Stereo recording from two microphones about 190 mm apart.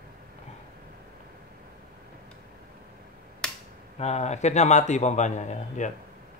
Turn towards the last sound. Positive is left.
turn(degrees=40)  # may be behind; listen again after turning